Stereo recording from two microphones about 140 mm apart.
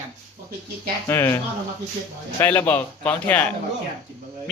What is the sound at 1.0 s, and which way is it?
Speech, 20° left (ahead or behind).